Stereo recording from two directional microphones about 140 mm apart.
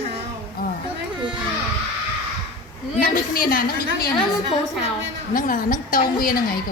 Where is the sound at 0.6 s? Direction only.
90° left.